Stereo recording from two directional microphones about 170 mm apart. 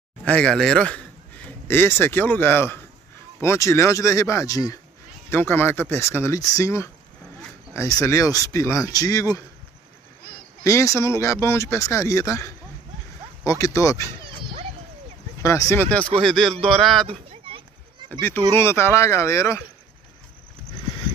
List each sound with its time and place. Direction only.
0.2 s a man's voice: 5° left (ahead or behind)
10.6 s speech: 20° left (ahead or behind)
15.4 s speech: 15° left (ahead or behind)
17.1 s a sound: 30° right (ahead or behind)
18.5 s speech: 15° left (ahead or behind)